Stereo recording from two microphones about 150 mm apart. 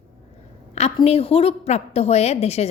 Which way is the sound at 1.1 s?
40° left (ahead or behind).